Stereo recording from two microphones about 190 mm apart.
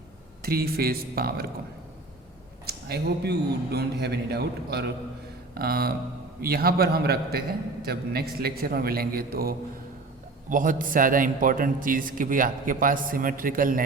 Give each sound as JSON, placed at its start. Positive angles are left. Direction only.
{"t": 0.4, "sound": "a man's voice", "side_deg": -50}
{"t": 2.6, "sound": "a man's voice", "side_deg": -60}